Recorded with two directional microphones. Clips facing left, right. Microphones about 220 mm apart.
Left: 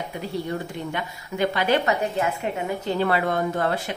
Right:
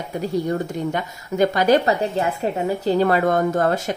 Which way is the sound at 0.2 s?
45° right (ahead or behind).